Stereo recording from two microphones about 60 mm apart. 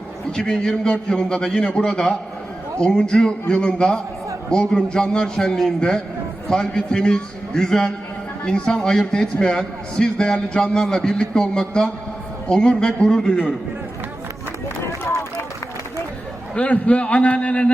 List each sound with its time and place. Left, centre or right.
0.3 s a man's voice: centre
16.6 s a man's voice: left